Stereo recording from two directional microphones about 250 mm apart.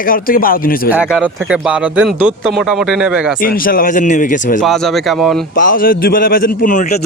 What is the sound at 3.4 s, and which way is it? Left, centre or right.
A man's voice, left.